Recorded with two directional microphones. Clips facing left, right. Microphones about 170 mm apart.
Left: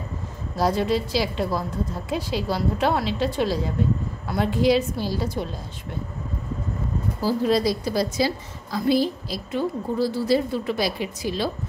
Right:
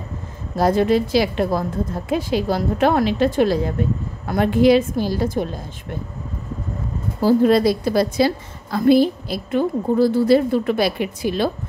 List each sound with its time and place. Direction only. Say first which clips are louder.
0.6 s a woman's voice: right 6 dB; 50° right (ahead or behind)
7.2 s a woman's voice: right 7 dB; 55° right (ahead or behind)